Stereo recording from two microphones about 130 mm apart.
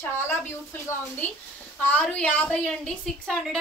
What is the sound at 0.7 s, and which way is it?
A woman's voice, 15° left (ahead or behind).